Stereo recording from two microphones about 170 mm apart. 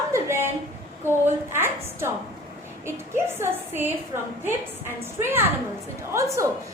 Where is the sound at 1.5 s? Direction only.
15° right (ahead or behind).